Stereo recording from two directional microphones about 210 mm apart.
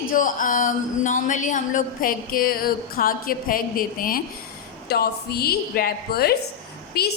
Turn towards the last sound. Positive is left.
turn(degrees=50)  # may be behind; listen again after turning